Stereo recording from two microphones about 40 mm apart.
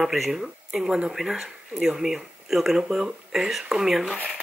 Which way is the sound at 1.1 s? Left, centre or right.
Centre.